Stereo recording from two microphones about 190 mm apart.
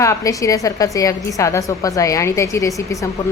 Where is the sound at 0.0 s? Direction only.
15° left (ahead or behind).